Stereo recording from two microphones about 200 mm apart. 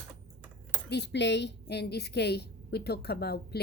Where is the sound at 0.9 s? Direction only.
60° left (ahead or behind).